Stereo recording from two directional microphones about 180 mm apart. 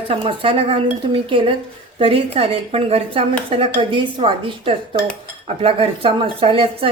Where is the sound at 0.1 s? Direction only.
30° right (ahead or behind).